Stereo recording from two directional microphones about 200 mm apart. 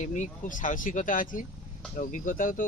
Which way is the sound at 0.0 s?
40° left (ahead or behind).